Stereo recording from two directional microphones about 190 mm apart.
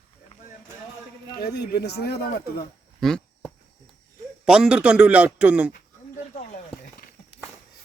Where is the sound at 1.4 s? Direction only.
60° left (ahead or behind).